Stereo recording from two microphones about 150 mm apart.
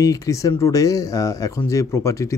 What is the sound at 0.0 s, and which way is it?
Speech, 20° left (ahead or behind).